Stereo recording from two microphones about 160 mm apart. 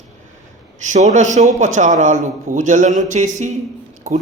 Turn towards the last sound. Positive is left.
turn(degrees=-45)  # may be behind; listen again after turning